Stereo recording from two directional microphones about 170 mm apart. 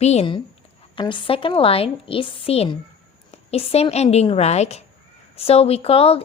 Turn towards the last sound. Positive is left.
turn(degrees=35)  # may be behind; listen again after turning